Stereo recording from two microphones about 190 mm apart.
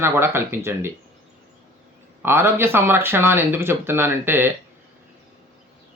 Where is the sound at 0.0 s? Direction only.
15° right (ahead or behind).